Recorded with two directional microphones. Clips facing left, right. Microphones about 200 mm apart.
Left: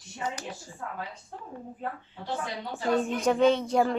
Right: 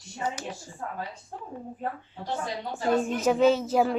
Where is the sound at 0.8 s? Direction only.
40° right (ahead or behind).